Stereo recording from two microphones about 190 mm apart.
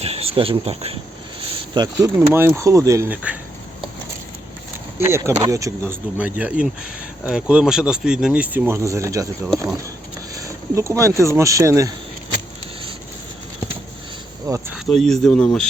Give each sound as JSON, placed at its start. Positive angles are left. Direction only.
{"t": 0.0, "sound": "speech", "side_deg": -30}
{"t": 1.7, "sound": "speech", "side_deg": -20}
{"t": 2.1, "sound": "speech", "side_deg": -10}
{"t": 4.9, "sound": "speech", "side_deg": -15}
{"t": 10.4, "sound": "speech", "side_deg": -15}
{"t": 14.5, "sound": "speech", "side_deg": -20}
{"t": 14.8, "sound": "speech", "side_deg": 0}